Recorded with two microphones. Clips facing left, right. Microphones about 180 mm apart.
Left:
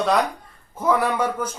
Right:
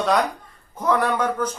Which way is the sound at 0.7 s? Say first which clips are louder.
Even; 5° left (ahead or behind).